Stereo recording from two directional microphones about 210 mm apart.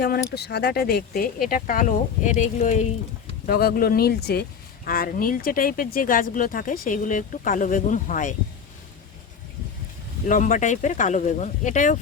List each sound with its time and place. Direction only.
0.3 s speech: 50° left (ahead or behind)
10.2 s speech: 40° left (ahead or behind)